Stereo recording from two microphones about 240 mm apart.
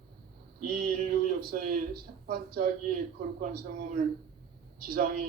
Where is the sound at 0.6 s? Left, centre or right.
Right.